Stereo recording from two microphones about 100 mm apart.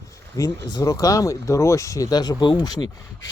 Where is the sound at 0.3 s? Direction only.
35° left (ahead or behind).